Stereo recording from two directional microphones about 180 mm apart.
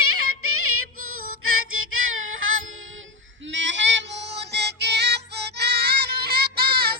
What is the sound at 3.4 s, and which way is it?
Female singing, 90° right.